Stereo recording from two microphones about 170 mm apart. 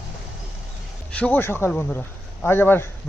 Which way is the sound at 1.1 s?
10° left (ahead or behind).